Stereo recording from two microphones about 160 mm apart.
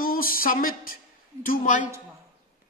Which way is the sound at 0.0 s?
65° left (ahead or behind).